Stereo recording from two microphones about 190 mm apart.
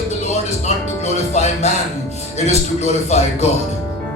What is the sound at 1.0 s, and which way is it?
Speech, 35° left (ahead or behind).